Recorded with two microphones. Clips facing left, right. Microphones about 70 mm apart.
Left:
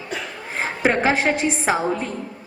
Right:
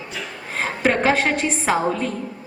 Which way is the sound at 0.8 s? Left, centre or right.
Centre.